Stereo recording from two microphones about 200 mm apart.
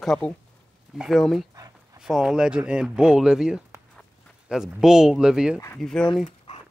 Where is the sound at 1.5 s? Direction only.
20° right (ahead or behind).